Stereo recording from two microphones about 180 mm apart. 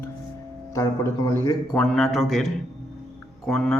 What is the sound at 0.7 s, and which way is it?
Speech, 20° left (ahead or behind).